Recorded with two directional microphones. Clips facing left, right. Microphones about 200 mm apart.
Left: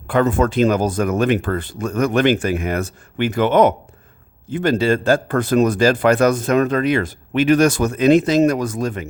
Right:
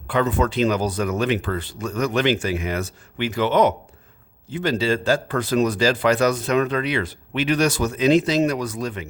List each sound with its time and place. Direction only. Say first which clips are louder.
0.1 s speech: left 4 dB; 50° left (ahead or behind)